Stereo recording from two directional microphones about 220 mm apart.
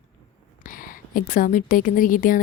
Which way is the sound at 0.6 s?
40° left (ahead or behind).